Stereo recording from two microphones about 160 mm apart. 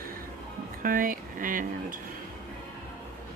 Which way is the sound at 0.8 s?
60° right (ahead or behind).